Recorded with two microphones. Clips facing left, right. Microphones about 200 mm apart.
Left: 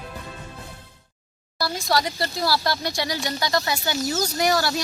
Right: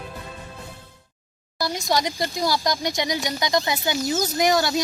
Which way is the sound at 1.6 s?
20° right (ahead or behind).